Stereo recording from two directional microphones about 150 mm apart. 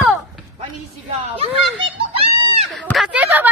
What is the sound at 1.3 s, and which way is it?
Children playing, 40° right (ahead or behind).